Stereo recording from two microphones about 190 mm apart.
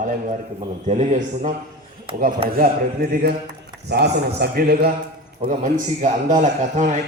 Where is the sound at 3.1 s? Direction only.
55° right (ahead or behind).